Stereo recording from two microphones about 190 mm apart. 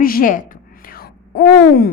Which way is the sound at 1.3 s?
55° left (ahead or behind).